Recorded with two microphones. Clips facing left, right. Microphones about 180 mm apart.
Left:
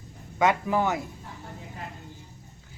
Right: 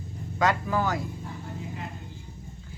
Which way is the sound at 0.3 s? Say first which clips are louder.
Left 2 dB; 20° left (ahead or behind).